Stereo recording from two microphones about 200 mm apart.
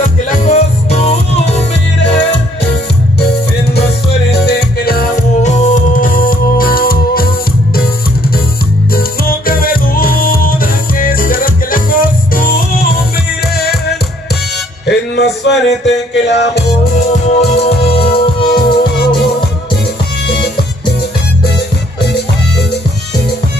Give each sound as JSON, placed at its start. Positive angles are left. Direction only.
{"t": 0.0, "sound": "music", "side_deg": 35}
{"t": 4.3, "sound": "music", "side_deg": 55}
{"t": 5.4, "sound": "music", "side_deg": 35}
{"t": 8.9, "sound": "music", "side_deg": 45}
{"t": 17.1, "sound": "music", "side_deg": 35}